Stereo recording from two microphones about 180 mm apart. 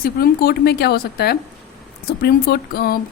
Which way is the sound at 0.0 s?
60° left (ahead or behind).